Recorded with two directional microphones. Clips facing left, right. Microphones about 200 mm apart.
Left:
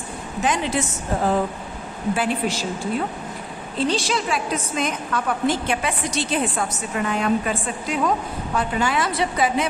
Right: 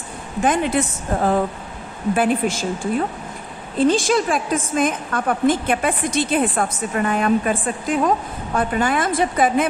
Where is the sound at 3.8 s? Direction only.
50° right (ahead or behind).